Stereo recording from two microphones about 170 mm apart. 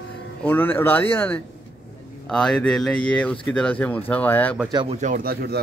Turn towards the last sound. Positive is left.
turn(degrees=-60)  # may be behind; listen again after turning